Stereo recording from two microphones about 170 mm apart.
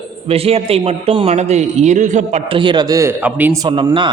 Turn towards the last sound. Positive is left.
turn(degrees=-25)  # may be behind; listen again after turning